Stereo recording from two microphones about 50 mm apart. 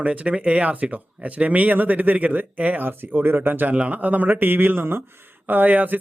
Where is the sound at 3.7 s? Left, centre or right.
Right.